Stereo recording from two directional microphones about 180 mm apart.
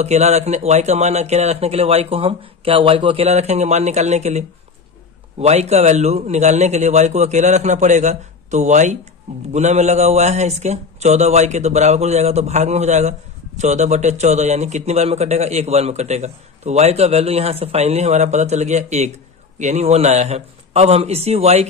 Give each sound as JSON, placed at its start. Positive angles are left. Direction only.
{"t": 0.0, "sound": "a man's voice", "side_deg": -40}